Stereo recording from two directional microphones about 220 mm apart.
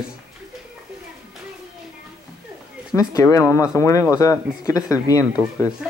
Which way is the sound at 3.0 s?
15° left (ahead or behind).